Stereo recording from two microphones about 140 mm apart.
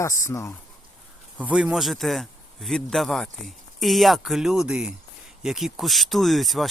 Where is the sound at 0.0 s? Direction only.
20° left (ahead or behind).